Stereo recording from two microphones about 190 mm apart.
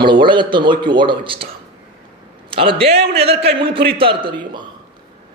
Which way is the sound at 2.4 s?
30° right (ahead or behind).